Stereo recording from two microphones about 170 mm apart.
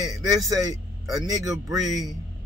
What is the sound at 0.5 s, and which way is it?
Speech, 20° right (ahead or behind).